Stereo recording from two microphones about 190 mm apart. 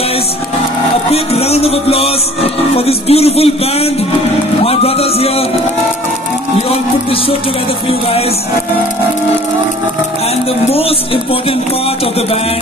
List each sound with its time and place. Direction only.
1.1 s a man's voice: 30° left (ahead or behind)
4.6 s music: 30° left (ahead or behind)